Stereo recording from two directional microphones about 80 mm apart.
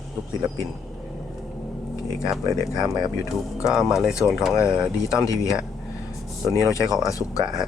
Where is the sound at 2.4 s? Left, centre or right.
Right.